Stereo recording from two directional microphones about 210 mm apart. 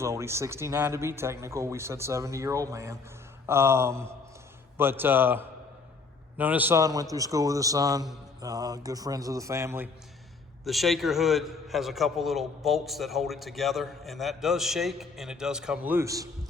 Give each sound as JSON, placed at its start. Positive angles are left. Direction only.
{"t": 0.0, "sound": "speech", "side_deg": -15}
{"t": 10.6, "sound": "a man's voice", "side_deg": 0}